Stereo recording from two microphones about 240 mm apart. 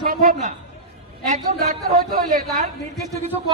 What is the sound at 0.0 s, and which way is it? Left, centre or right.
A man's voice, right.